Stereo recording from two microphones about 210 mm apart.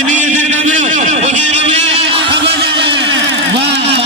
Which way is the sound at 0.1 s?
35° right (ahead or behind).